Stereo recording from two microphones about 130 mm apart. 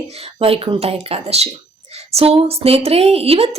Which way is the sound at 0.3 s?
45° right (ahead or behind).